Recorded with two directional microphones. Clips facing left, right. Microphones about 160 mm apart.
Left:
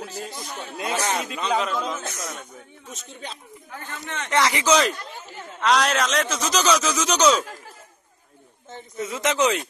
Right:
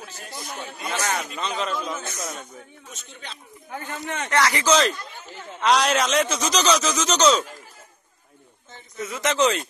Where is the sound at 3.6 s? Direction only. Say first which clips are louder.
Right 5 dB; 15° right (ahead or behind).